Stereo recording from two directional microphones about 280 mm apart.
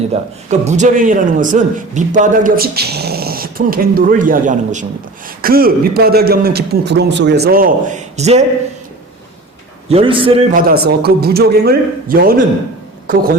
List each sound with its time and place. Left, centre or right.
0.1 s a man's voice: right
9.9 s a man's voice: centre
10.7 s a man's voice: right